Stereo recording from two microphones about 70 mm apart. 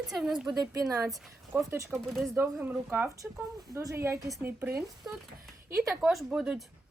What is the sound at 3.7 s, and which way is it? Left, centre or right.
Speech, right.